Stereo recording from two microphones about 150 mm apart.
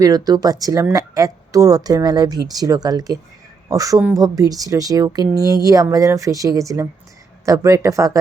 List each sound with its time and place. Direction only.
0.0 s speech: 25° right (ahead or behind)